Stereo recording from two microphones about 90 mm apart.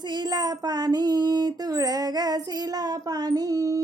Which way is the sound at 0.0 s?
55° right (ahead or behind).